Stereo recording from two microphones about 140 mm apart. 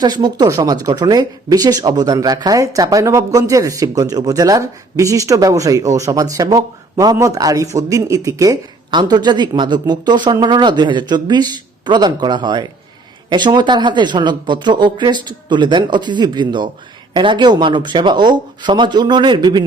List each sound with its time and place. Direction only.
0.0 s speech: 30° right (ahead or behind)